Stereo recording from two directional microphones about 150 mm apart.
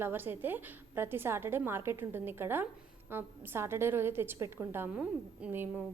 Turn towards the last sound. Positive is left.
turn(degrees=-15)  # may be behind; listen again after turning